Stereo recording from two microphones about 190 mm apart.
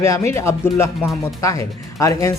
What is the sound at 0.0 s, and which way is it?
Speech, 15° left (ahead or behind).